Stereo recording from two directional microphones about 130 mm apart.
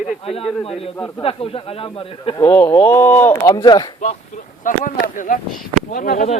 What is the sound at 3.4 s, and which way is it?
Speech, 35° left (ahead or behind).